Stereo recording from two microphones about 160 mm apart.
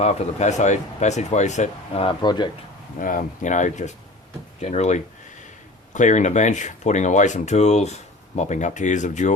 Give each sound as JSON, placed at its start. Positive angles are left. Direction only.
{"t": 0.0, "sound": "speech", "side_deg": 45}
{"t": 2.0, "sound": "speech", "side_deg": 30}
{"t": 3.0, "sound": "speech", "side_deg": 60}